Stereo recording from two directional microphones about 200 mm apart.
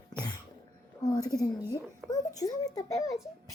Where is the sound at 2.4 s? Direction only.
20° left (ahead or behind).